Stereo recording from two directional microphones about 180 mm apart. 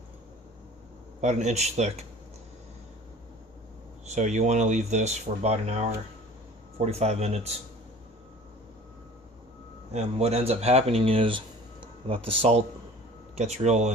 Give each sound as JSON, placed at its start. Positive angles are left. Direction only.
{"t": 1.2, "sound": "speech", "side_deg": -40}
{"t": 4.0, "sound": "speech", "side_deg": -40}
{"t": 6.8, "sound": "speech", "side_deg": -35}
{"t": 9.9, "sound": "speech", "side_deg": -35}